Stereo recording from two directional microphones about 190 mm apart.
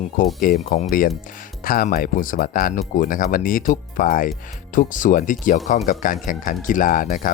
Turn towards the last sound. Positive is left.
turn(degrees=45)  # may be behind; listen again after turning